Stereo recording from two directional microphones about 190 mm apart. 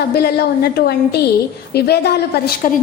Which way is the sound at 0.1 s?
55° left (ahead or behind).